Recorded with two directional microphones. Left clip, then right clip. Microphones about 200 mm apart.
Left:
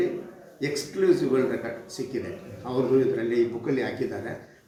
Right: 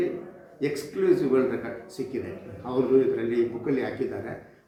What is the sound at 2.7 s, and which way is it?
Speech, 5° left (ahead or behind).